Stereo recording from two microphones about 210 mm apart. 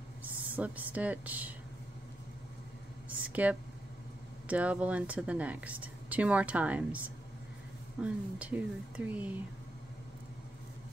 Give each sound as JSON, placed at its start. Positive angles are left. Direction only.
{"t": 0.2, "sound": "speech", "side_deg": -5}
{"t": 3.1, "sound": "a sound", "side_deg": -5}
{"t": 4.5, "sound": "speech", "side_deg": -5}
{"t": 8.0, "sound": "speech", "side_deg": -5}